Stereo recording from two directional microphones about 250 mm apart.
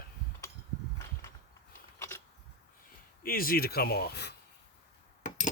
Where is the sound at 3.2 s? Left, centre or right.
Left.